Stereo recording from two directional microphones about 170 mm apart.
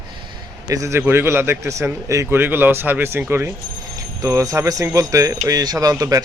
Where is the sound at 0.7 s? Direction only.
15° right (ahead or behind).